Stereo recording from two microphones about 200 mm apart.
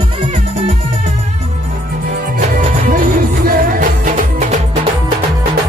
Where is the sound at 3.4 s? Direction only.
40° right (ahead or behind).